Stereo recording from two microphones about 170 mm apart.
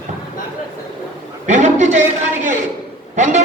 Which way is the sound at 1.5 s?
45° right (ahead or behind).